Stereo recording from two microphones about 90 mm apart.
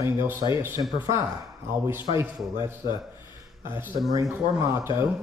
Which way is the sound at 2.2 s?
30° right (ahead or behind).